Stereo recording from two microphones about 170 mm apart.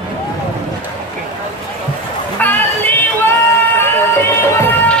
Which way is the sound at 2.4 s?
10° left (ahead or behind).